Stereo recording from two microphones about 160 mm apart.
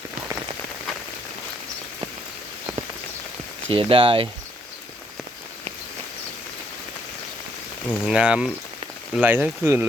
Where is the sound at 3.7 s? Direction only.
35° right (ahead or behind).